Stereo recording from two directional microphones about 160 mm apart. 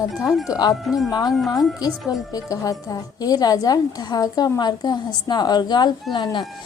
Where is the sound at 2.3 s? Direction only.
20° left (ahead or behind).